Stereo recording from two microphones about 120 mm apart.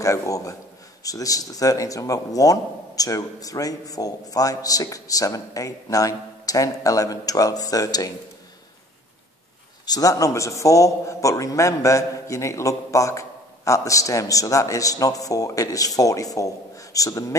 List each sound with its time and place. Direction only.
0.0 s a man's voice: 25° left (ahead or behind)
9.8 s a man's voice: 30° left (ahead or behind)